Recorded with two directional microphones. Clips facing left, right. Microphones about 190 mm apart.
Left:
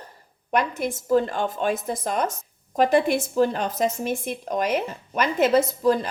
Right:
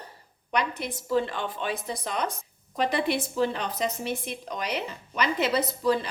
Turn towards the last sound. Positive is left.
turn(degrees=45)  # may be behind; listen again after turning